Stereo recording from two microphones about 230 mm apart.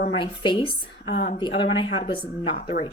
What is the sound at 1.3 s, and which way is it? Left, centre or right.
Speech, left.